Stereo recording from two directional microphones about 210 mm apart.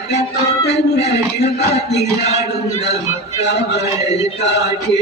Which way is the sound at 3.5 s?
55° left (ahead or behind).